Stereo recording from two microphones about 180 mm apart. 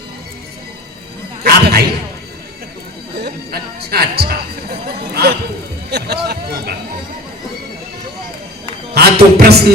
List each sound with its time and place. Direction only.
1.5 s a sound: 60° right (ahead or behind)
3.2 s speech: 60° right (ahead or behind)
9.0 s speech: 60° right (ahead or behind)